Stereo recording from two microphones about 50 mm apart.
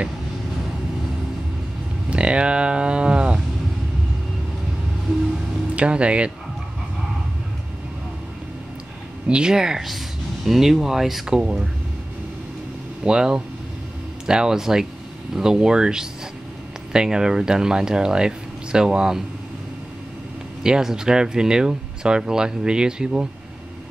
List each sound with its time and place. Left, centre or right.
2.0 s speech: right
5.8 s speech: right
9.3 s speech: centre
13.0 s speech: centre
20.6 s speech: centre